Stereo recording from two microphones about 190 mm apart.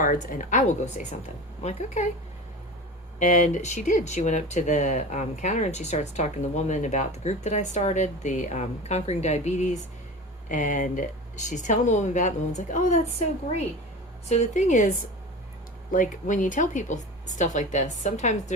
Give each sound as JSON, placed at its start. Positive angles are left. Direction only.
{"t": 0.0, "sound": "a woman's voice", "side_deg": 45}
{"t": 3.2, "sound": "speech", "side_deg": 40}